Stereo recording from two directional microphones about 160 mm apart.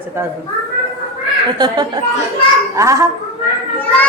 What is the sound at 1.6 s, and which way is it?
A woman's voice, 25° right (ahead or behind).